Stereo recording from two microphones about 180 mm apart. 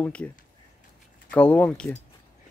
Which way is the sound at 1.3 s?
10° left (ahead or behind).